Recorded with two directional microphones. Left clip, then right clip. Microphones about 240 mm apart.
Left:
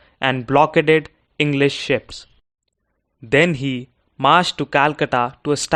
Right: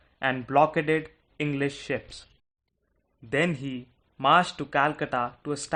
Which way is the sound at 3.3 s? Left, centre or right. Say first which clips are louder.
Left 11 dB; left.